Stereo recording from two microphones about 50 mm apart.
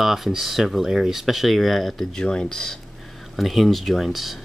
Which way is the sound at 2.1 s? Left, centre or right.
Centre.